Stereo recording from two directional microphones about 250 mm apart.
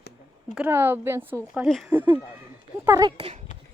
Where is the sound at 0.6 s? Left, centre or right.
Centre.